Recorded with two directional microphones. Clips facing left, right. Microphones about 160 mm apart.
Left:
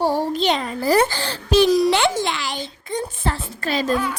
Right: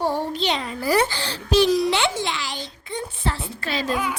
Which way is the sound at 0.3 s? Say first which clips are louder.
Left 4 dB; 50° left (ahead or behind).